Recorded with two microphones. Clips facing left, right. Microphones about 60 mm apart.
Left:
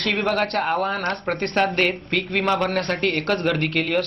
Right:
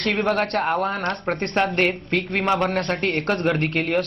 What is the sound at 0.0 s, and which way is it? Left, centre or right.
Speech, right.